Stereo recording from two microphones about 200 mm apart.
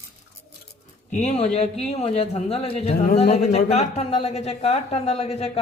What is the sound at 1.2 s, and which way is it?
Speech, 35° left (ahead or behind).